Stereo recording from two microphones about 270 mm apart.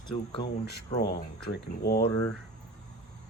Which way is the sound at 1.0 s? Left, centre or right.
Left.